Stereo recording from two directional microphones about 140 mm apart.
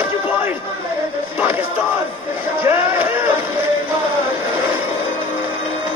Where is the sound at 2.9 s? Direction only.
20° right (ahead or behind).